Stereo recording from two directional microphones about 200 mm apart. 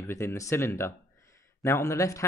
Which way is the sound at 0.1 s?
10° left (ahead or behind).